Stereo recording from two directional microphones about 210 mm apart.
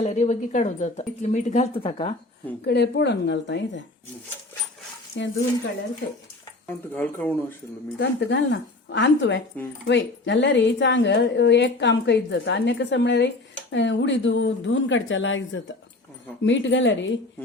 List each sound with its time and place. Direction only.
0.0 s speech: 35° left (ahead or behind)
2.6 s a woman's voice: 55° left (ahead or behind)
5.2 s a woman's voice: 60° left (ahead or behind)
6.7 s speech: 10° left (ahead or behind)
7.9 s a woman's voice: 60° left (ahead or behind)